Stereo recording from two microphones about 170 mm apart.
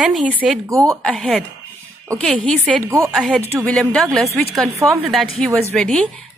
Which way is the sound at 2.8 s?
15° right (ahead or behind).